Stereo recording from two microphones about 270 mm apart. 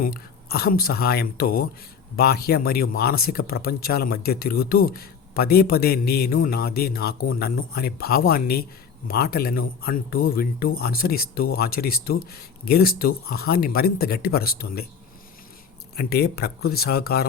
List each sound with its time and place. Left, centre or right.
0.0 s speech: left
16.0 s speech: left